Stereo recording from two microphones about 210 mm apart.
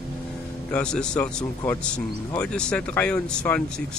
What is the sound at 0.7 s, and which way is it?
Speech, 5° left (ahead or behind).